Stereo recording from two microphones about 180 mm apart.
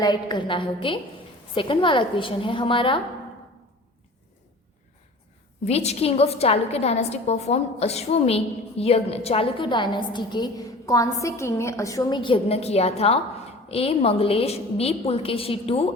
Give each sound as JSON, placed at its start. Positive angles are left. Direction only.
{"t": 0.0, "sound": "a woman's voice", "side_deg": 25}
{"t": 5.6, "sound": "a woman's voice", "side_deg": 35}